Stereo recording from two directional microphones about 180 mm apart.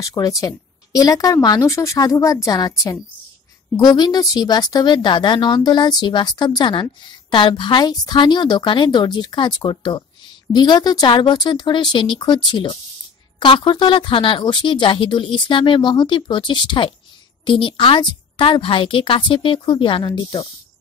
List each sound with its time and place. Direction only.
0.0 s speech: 20° left (ahead or behind)